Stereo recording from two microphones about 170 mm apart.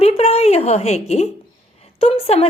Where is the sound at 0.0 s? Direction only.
35° left (ahead or behind).